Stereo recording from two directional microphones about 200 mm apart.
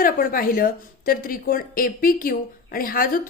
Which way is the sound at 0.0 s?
45° left (ahead or behind).